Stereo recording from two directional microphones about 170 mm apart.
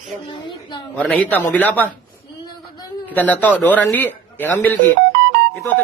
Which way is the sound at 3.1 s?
10° left (ahead or behind).